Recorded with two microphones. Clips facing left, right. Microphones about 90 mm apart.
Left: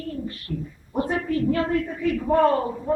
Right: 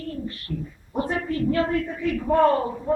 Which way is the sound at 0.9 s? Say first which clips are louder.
Left 2 dB; centre (ahead or behind).